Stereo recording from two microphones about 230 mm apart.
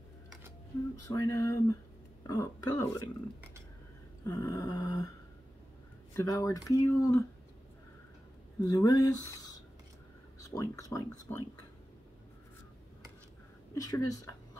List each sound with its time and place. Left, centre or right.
1.0 s speech: centre
4.3 s speech: centre
6.1 s speech: centre
8.6 s speech: centre
13.7 s speech: centre